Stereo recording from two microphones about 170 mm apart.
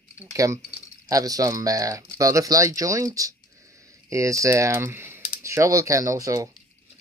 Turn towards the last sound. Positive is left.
turn(degrees=-20)  # may be behind; listen again after turning